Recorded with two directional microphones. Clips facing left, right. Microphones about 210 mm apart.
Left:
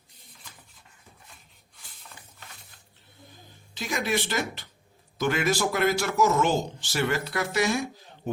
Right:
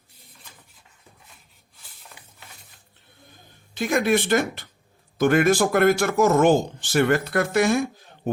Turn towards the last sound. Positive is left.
turn(degrees=-55)  # may be behind; listen again after turning